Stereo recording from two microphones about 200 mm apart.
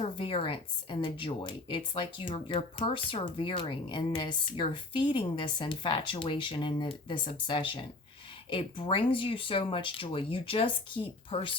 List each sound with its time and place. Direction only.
0.0 s speech: 25° left (ahead or behind)